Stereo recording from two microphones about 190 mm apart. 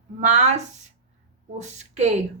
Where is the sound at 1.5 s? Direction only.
35° right (ahead or behind).